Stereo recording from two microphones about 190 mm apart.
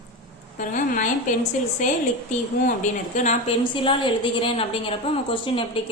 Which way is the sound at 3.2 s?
40° left (ahead or behind).